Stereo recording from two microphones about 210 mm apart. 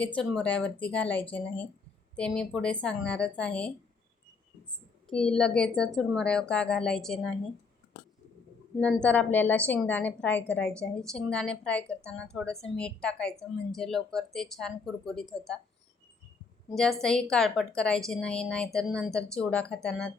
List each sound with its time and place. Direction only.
0.2 s a woman's voice: 5° left (ahead or behind)
5.0 s a woman's voice: 5° left (ahead or behind)
8.8 s a woman's voice: 5° left (ahead or behind)
16.6 s a woman's voice: centre (ahead or behind)